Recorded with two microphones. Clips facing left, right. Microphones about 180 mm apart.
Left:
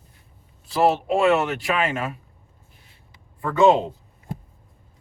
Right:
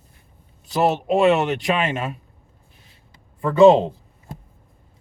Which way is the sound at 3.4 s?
25° right (ahead or behind).